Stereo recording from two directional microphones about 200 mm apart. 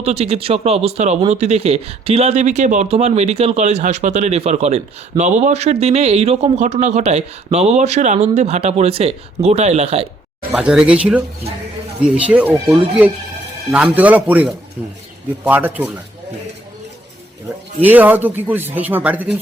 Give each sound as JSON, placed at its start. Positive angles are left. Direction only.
{"t": 0.0, "sound": "speech", "side_deg": -30}
{"t": 10.5, "sound": "speech", "side_deg": -5}
{"t": 17.8, "sound": "speech", "side_deg": -10}